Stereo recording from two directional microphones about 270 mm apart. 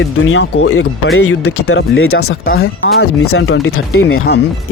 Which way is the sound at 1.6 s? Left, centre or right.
Left.